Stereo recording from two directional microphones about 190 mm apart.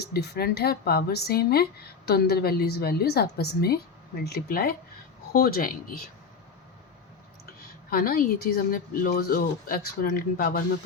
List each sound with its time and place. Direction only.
0.0 s a woman's voice: 55° left (ahead or behind)
7.9 s speech: 50° left (ahead or behind)